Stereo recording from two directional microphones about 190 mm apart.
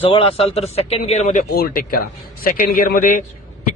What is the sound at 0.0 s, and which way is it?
A man's voice, 30° left (ahead or behind).